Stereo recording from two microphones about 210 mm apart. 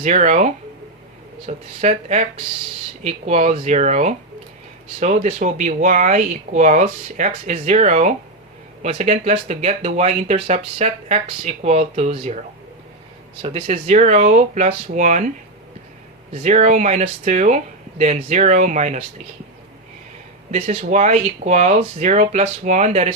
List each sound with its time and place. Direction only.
0.0 s speech: 35° right (ahead or behind)
13.4 s speech: 30° right (ahead or behind)
16.3 s speech: 30° right (ahead or behind)
20.5 s speech: 35° right (ahead or behind)